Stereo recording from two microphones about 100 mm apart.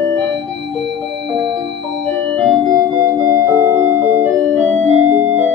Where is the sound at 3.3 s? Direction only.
25° right (ahead or behind).